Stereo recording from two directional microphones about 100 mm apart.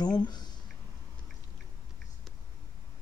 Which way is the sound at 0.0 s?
45° left (ahead or behind).